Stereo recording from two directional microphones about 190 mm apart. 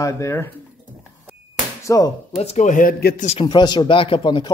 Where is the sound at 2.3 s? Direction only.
35° left (ahead or behind); by 3.3 s 50° left (ahead or behind).